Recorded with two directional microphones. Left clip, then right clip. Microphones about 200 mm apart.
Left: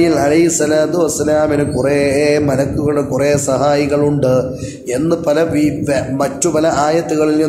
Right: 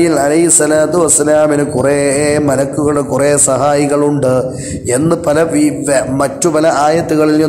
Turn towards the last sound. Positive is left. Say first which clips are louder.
# right 3 dB
turn(degrees=-20)  # may be behind; listen again after turning